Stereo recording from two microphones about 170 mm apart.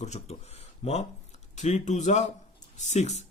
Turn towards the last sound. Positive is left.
turn(degrees=40)  # may be behind; listen again after turning